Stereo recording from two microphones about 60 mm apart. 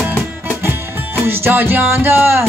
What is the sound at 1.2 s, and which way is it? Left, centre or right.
Music, right.